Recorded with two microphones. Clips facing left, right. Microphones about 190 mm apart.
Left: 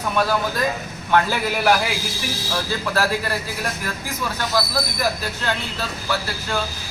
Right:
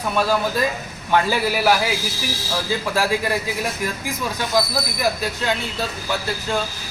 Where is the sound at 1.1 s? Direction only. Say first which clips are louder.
Right 1 dB; 10° right (ahead or behind).